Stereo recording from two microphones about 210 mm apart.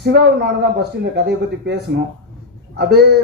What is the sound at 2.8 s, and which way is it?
Speech, 50° right (ahead or behind).